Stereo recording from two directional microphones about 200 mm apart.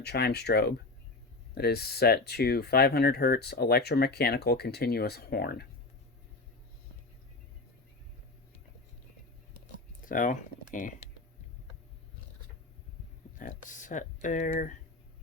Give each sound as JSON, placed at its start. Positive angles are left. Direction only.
{"t": 0.0, "sound": "speech", "side_deg": 55}
{"t": 10.0, "sound": "speech", "side_deg": 40}
{"t": 13.4, "sound": "speech", "side_deg": 40}